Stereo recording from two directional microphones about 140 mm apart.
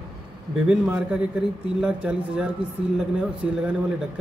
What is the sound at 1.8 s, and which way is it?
Speech, 5° right (ahead or behind).